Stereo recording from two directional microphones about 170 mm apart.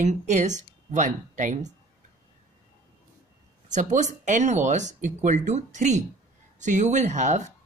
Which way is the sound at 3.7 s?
45° right (ahead or behind).